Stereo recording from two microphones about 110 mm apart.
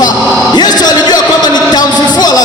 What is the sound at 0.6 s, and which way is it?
Music, 40° left (ahead or behind).